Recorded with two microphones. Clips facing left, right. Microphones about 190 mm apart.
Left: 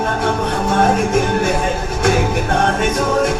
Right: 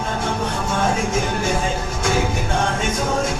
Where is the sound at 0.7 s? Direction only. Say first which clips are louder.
Left 7 dB; 60° left (ahead or behind).